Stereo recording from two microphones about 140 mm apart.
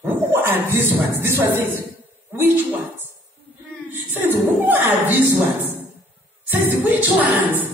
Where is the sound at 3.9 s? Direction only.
15° right (ahead or behind).